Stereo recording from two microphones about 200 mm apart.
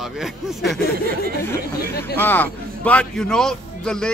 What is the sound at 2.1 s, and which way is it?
Speech, 10° left (ahead or behind).